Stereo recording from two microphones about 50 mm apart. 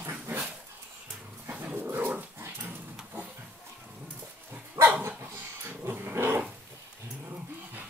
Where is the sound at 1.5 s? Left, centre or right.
Right.